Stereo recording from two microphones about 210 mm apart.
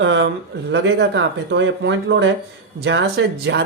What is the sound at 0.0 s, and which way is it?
Speech, 60° right (ahead or behind).